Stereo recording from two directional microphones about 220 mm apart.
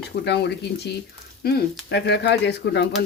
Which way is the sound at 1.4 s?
50° left (ahead or behind).